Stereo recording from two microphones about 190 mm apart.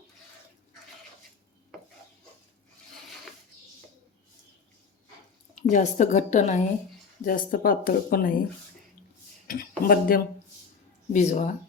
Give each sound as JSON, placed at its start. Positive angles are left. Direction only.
{"t": 5.5, "sound": "a woman's voice", "side_deg": 40}
{"t": 9.5, "sound": "speech", "side_deg": 50}
{"t": 11.1, "sound": "a woman's voice", "side_deg": 40}